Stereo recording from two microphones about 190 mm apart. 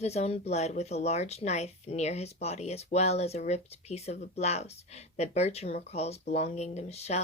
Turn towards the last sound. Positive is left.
turn(degrees=35)  # may be behind; listen again after turning